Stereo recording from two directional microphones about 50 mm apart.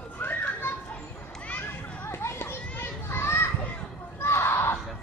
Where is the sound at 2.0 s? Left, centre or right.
Left.